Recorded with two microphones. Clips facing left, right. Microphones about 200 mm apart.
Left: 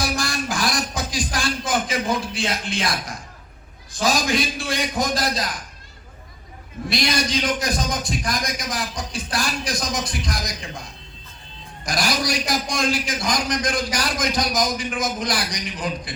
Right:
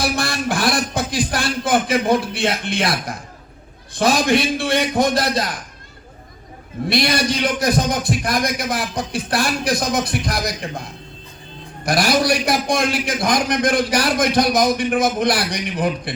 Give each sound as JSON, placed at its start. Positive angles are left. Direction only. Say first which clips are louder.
{"t": 0.0, "sound": "a sound", "louder": "right 4 dB", "side_deg": -60}
{"t": 3.9, "sound": "a man's voice", "louder": "right 5 dB", "side_deg": -60}
{"t": 6.9, "sound": "a man's voice", "louder": "right 4 dB", "side_deg": -60}
{"t": 11.9, "sound": "a man's voice", "louder": "right 7 dB", "side_deg": -60}